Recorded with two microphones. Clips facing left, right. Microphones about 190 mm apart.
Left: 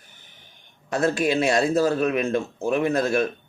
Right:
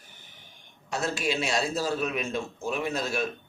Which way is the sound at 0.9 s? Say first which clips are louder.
Left 7 dB; 55° left (ahead or behind).